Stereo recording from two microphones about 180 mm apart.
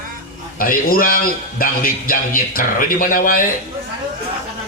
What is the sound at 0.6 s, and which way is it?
A man's voice, 50° left (ahead or behind).